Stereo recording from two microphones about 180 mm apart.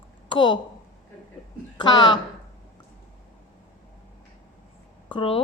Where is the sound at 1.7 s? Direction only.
25° left (ahead or behind).